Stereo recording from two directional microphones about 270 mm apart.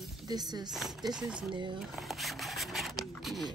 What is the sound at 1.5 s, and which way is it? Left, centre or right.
Speech, centre.